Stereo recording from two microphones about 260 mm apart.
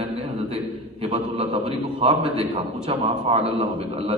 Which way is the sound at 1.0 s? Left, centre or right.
Right.